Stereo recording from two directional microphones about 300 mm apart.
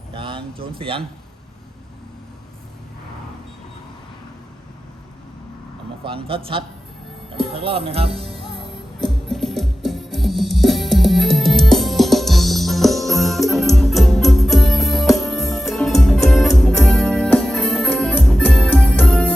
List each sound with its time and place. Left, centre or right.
0.1 s speech: centre
6.1 s speech: centre
9.0 s music: centre